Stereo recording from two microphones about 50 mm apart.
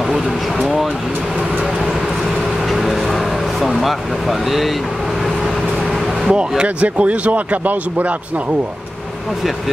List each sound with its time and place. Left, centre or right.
0.1 s speech: centre
2.7 s a sound: centre
6.2 s speech: centre